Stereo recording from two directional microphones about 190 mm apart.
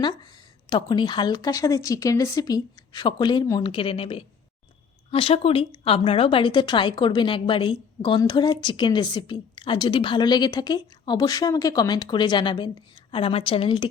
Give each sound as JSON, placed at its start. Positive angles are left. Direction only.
{"t": 0.7, "sound": "a woman's voice", "side_deg": 25}